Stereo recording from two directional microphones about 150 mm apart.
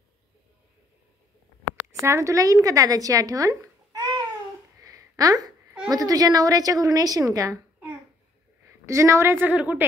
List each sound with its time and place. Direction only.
1.9 s speech: 20° right (ahead or behind)
4.8 s a sound: 25° right (ahead or behind)
5.9 s a woman's voice: 25° right (ahead or behind)
8.8 s a woman's voice: 20° right (ahead or behind)